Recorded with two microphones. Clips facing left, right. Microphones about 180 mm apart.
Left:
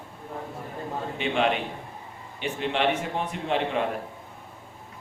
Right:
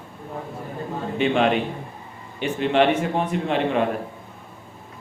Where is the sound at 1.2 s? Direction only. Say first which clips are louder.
Right 6 dB; 45° right (ahead or behind).